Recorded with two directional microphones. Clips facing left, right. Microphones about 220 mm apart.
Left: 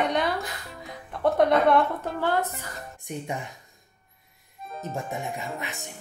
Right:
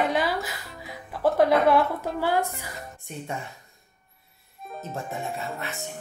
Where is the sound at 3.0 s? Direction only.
15° left (ahead or behind).